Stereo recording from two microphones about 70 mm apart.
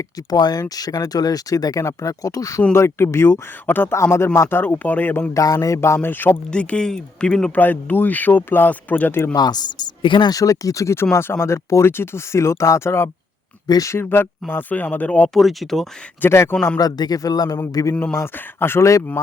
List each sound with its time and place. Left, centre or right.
0.3 s speech: left
1.8 s speech: left
2.7 s speech: left
5.3 s speech: left
6.0 s speech: left
6.5 s speech: centre
7.5 s speech: left
9.3 s speech: left
10.4 s speech: left
15.3 s speech: centre
16.2 s speech: left
16.7 s speech: left
18.3 s speech: left